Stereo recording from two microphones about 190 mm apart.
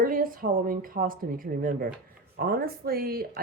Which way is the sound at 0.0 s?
50° right (ahead or behind).